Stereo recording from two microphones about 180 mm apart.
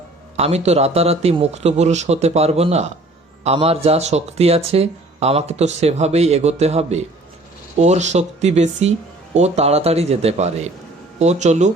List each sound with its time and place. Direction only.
0.3 s speech: 35° right (ahead or behind)